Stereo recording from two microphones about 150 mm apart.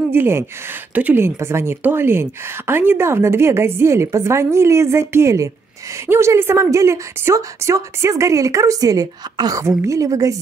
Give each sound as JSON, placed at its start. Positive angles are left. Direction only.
{"t": 0.1, "sound": "a woman's voice", "side_deg": -15}